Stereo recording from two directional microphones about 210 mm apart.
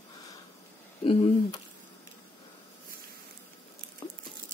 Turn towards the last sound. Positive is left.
turn(degrees=25)  # may be behind; listen again after turning